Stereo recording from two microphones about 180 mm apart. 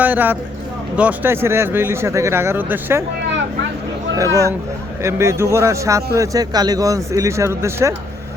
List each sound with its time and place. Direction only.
0.0 s speech: 10° right (ahead or behind)
4.3 s speech: 20° left (ahead or behind)
5.0 s speech: 15° right (ahead or behind)